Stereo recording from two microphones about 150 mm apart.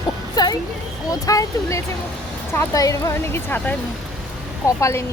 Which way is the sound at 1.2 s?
25° left (ahead or behind).